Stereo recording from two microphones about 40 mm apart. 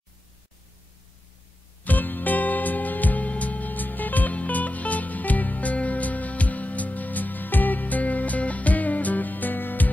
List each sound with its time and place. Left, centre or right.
1.9 s music: left